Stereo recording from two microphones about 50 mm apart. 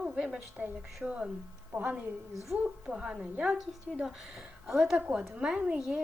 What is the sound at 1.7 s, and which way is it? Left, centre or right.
Speech, right.